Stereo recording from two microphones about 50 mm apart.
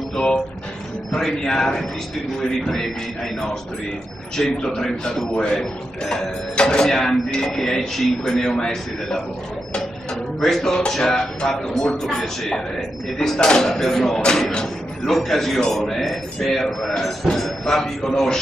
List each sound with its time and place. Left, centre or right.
0.1 s music: centre
1.1 s speech: centre
4.4 s speech: centre
10.4 s a man's voice: centre